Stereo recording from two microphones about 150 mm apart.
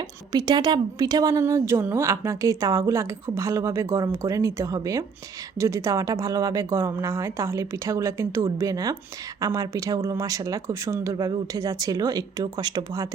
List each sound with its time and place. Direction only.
0.3 s a woman's voice: 25° right (ahead or behind)